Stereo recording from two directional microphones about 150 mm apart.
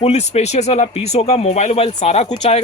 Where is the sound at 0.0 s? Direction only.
45° left (ahead or behind).